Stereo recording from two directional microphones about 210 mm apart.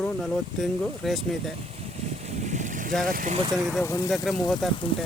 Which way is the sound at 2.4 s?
35° right (ahead or behind).